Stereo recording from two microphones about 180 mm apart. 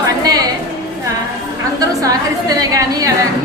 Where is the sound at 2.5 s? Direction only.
20° right (ahead or behind).